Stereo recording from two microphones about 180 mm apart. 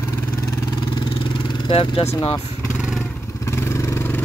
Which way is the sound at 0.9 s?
25° left (ahead or behind).